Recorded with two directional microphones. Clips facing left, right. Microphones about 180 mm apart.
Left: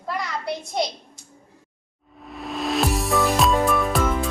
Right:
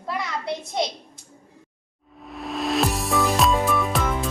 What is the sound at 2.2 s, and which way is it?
Music, centre (ahead or behind).